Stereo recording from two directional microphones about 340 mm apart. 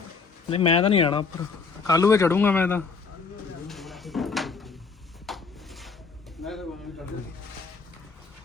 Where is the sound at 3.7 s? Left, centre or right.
Centre.